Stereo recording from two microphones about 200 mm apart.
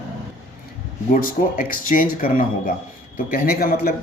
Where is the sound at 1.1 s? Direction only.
45° left (ahead or behind).